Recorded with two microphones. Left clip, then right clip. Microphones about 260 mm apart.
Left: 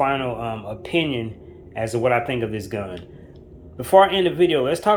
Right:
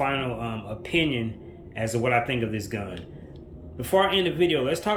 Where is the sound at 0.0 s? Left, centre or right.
Centre.